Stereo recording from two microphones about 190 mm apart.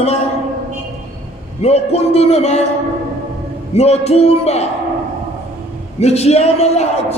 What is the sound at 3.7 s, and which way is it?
Speech, 35° left (ahead or behind).